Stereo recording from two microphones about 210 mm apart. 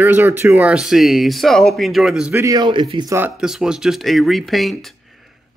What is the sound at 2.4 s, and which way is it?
Speech, 20° right (ahead or behind).